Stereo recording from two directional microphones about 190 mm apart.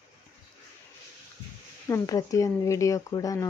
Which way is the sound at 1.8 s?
15° left (ahead or behind).